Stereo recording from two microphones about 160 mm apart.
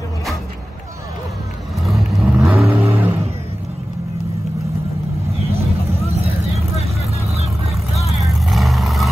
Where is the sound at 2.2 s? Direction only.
5° right (ahead or behind).